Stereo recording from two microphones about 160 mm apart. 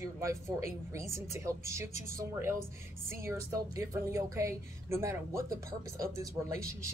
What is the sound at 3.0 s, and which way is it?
Speech, 15° right (ahead or behind).